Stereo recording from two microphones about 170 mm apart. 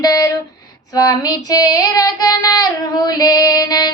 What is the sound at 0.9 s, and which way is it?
Child singing, 20° left (ahead or behind).